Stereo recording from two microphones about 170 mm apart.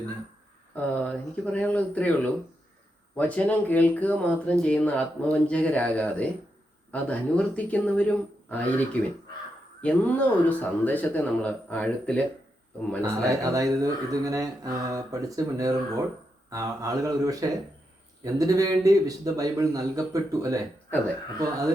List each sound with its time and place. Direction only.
0.7 s speech: 10° left (ahead or behind)
9.8 s speech: 10° left (ahead or behind)
13.0 s speech: 20° right (ahead or behind)